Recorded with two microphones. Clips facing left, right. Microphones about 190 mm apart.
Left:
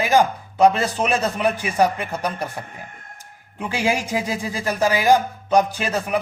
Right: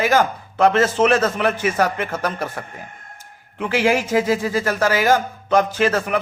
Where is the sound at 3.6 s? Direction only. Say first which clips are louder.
Right 4 dB; 15° left (ahead or behind).